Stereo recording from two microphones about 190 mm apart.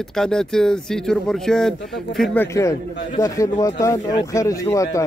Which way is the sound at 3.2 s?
15° left (ahead or behind).